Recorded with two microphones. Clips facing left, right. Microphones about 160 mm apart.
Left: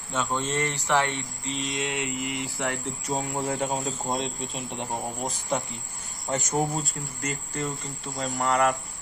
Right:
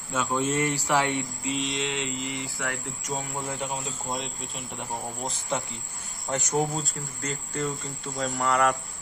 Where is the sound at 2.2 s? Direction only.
20° left (ahead or behind).